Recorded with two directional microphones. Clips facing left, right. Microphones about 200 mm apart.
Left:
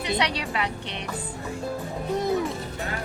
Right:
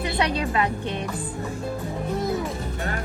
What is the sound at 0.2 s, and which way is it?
Speech, 50° right (ahead or behind).